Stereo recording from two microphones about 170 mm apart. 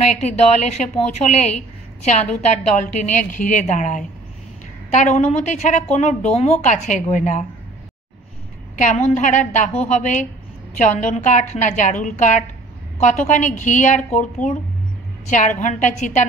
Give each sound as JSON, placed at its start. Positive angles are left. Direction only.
{"t": 0.0, "sound": "a woman's voice", "side_deg": 40}
{"t": 8.7, "sound": "a woman's voice", "side_deg": 45}